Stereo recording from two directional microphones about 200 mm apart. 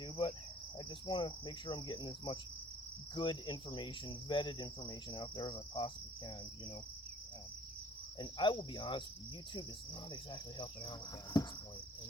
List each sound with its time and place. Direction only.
0.0 s insect: 25° left (ahead or behind)
0.8 s cricket: 20° left (ahead or behind)
8.2 s cricket: 25° left (ahead or behind)
10.1 s cricket: 20° left (ahead or behind)